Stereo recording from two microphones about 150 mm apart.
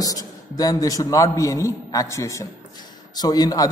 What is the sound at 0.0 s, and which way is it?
A man's voice, 25° left (ahead or behind).